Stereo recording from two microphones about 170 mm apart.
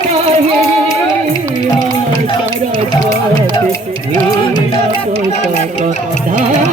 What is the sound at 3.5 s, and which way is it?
Music, 20° left (ahead or behind).